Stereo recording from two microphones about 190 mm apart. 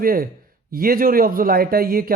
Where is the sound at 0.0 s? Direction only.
50° right (ahead or behind).